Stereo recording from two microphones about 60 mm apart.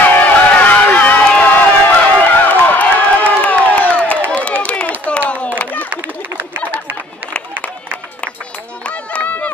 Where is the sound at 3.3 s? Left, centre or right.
Left.